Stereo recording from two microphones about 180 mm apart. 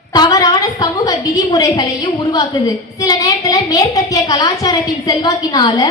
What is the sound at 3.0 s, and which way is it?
A woman's voice, 20° left (ahead or behind).